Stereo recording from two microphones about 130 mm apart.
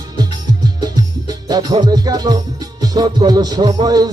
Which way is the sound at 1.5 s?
30° right (ahead or behind).